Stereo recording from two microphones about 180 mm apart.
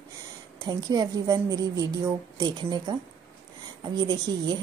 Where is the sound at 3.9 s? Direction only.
25° right (ahead or behind).